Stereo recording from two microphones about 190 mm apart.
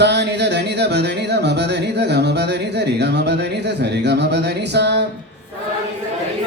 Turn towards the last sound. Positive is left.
turn(degrees=-65)  # may be behind; listen again after turning